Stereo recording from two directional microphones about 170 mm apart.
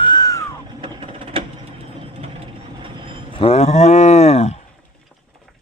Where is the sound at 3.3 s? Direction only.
35° left (ahead or behind).